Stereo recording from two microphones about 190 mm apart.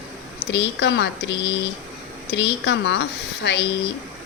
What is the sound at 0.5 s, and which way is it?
Speech, 65° left (ahead or behind).